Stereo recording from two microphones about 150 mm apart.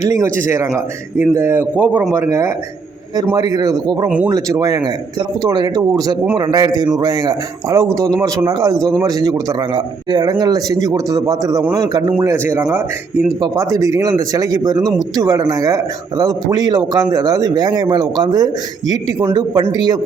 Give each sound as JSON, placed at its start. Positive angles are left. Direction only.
{"t": 0.0, "sound": "speech", "side_deg": -20}
{"t": 13.4, "sound": "speech", "side_deg": -25}